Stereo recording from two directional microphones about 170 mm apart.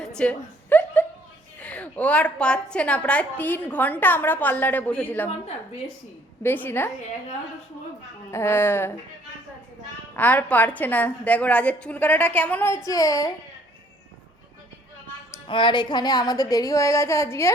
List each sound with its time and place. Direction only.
0.0 s a sound: 5° left (ahead or behind)
1.5 s a woman's voice: 10° left (ahead or behind)
6.4 s a woman's voice: 10° left (ahead or behind)
8.3 s a woman's voice: 15° left (ahead or behind)
10.2 s a woman's voice: 10° left (ahead or behind)
15.4 s a woman's voice: 30° left (ahead or behind)